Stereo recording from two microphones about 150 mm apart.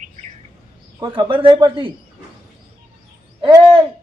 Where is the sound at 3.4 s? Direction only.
30° right (ahead or behind).